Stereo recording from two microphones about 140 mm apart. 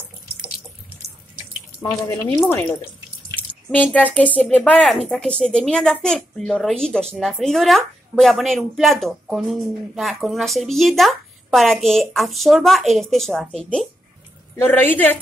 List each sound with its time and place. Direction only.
2.5 s a woman's voice: 15° left (ahead or behind)
3.9 s a woman's voice: 10° left (ahead or behind)